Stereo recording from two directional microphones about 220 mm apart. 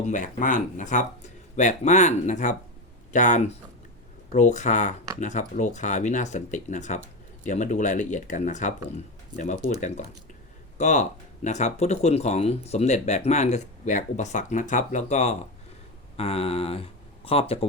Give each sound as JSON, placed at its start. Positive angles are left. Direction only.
{"t": 0.0, "sound": "speech", "side_deg": 35}
{"t": 10.8, "sound": "speech", "side_deg": 30}